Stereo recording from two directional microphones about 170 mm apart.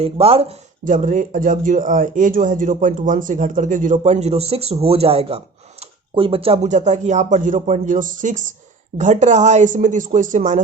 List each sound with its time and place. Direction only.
0.0 s speech: 35° right (ahead or behind)
0.9 s speech: 50° right (ahead or behind)